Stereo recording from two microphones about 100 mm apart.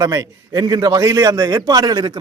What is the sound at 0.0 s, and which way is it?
A man's voice, 35° right (ahead or behind).